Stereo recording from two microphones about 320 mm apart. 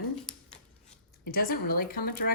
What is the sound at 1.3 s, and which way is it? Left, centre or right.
Speech, left.